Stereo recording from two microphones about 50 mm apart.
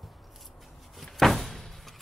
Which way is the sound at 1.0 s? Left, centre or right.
Centre.